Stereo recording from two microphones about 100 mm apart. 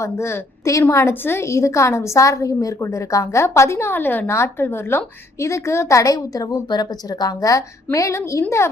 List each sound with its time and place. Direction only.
0.0 s a woman's voice: 30° left (ahead or behind)